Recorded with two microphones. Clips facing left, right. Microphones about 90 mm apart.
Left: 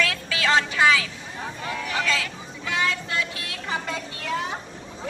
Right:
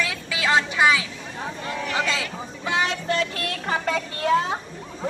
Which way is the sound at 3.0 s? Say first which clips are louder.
Right 5 dB; 50° right (ahead or behind).